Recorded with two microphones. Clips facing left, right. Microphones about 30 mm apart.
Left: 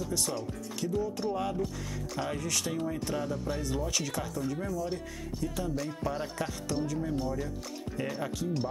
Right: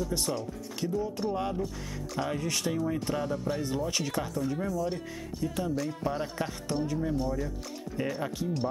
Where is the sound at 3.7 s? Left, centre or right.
Centre.